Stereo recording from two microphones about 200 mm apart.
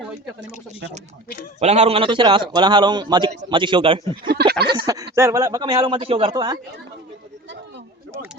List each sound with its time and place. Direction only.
1.5 s a man's voice: 35° right (ahead or behind)
4.3 s a sound: 50° right (ahead or behind)
5.1 s a man's voice: 15° right (ahead or behind)